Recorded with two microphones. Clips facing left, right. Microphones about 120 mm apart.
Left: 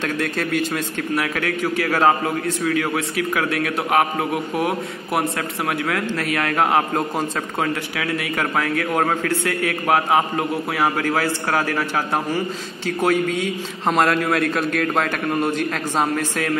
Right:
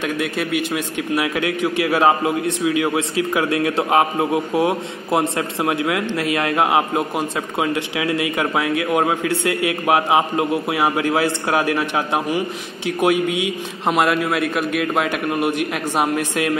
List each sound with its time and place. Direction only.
0.0 s a man's voice: 10° right (ahead or behind)